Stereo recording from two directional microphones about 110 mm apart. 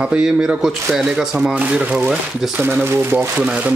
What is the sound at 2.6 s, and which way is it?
A man's voice, 20° right (ahead or behind).